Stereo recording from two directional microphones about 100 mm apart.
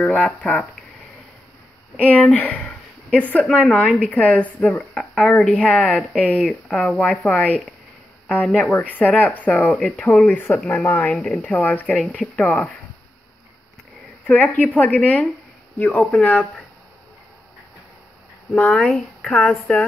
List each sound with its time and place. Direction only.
0.0 s speech: 15° left (ahead or behind)
2.0 s speech: 15° left (ahead or behind)
14.2 s speech: 15° left (ahead or behind)
18.5 s speech: 10° left (ahead or behind)